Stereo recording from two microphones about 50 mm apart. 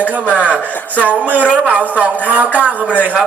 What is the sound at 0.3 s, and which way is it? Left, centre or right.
Speech, right.